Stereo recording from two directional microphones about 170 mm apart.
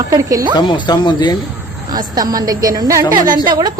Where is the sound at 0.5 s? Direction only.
25° left (ahead or behind).